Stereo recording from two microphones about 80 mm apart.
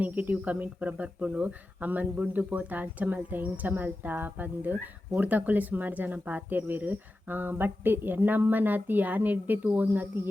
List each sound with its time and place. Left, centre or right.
0.0 s speech: right